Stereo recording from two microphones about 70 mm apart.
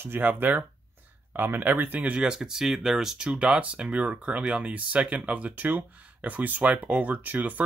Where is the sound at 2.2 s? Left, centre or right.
Centre; by 7.6 s right.